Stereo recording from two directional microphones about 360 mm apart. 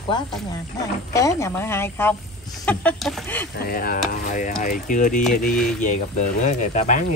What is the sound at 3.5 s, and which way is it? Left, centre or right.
Sizzle, left.